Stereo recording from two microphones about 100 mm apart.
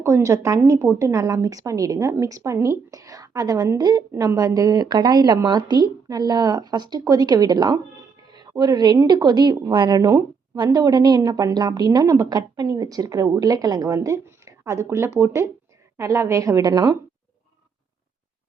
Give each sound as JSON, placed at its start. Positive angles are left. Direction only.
{"t": 0.0, "sound": "a woman's voice", "side_deg": -30}
{"t": 8.3, "sound": "music", "side_deg": -45}
{"t": 9.0, "sound": "a woman's voice", "side_deg": -45}